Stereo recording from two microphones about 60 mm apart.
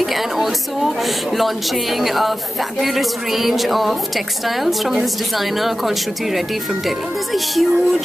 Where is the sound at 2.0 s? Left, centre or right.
Centre.